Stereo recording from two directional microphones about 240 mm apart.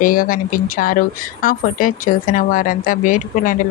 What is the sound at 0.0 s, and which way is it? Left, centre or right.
Speech, left.